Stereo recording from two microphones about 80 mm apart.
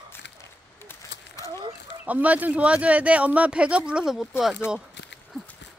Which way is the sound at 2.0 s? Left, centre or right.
Centre.